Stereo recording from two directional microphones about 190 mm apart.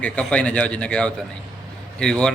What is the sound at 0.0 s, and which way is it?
A man's voice, 5° left (ahead or behind).